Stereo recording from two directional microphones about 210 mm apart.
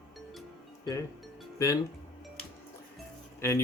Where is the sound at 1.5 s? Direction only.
15° left (ahead or behind).